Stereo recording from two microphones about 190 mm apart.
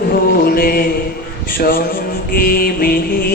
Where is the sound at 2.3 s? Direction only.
50° left (ahead or behind).